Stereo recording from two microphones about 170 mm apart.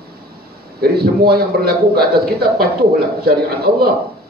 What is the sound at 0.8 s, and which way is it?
A man's voice, 65° right (ahead or behind).